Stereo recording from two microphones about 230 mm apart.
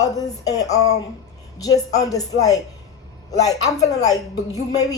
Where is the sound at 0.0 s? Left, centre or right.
Centre.